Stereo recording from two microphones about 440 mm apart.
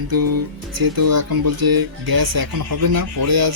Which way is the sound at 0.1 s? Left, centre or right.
Right.